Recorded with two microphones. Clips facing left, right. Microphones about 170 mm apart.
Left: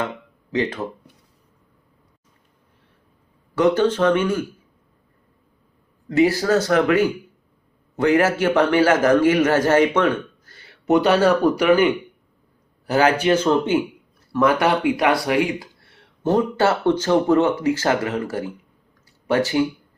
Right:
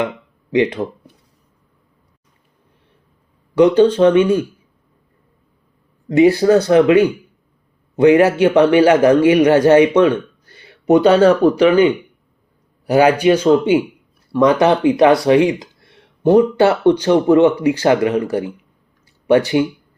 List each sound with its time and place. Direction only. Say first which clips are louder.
0.5 s speech: right 7 dB; 15° right (ahead or behind)
3.5 s speech: right 6 dB; 15° right (ahead or behind)
6.1 s speech: right 6 dB; 20° right (ahead or behind)
10.5 s a sound: right 5 dB; 15° right (ahead or behind)
12.8 s speech: right 6 dB; 15° right (ahead or behind)